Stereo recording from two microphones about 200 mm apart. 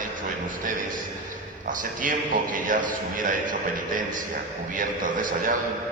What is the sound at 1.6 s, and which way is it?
A man's voice, 40° right (ahead or behind).